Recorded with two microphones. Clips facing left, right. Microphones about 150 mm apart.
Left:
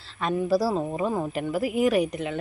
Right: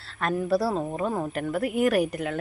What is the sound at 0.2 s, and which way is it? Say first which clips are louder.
A woman's voice: left 1 dB; centre (ahead or behind).